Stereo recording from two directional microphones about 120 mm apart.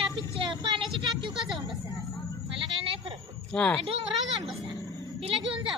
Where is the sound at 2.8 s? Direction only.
50° right (ahead or behind).